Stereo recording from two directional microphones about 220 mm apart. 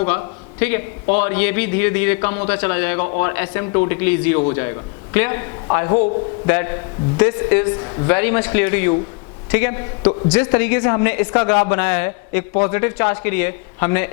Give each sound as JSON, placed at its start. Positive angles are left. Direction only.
{"t": 0.0, "sound": "a man's voice", "side_deg": 20}
{"t": 1.0, "sound": "a man's voice", "side_deg": 30}
{"t": 1.3, "sound": "speech", "side_deg": 10}
{"t": 3.0, "sound": "a man's voice", "side_deg": 30}
{"t": 3.2, "sound": "a man's voice", "side_deg": 15}